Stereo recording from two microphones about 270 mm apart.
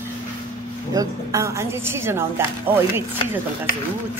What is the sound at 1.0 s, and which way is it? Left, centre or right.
Speech, centre.